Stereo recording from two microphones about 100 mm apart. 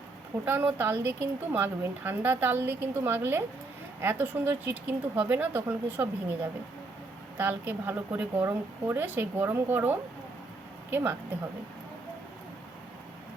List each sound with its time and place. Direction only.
0.4 s a woman's voice: 20° right (ahead or behind)
7.3 s a woman's voice: 15° right (ahead or behind)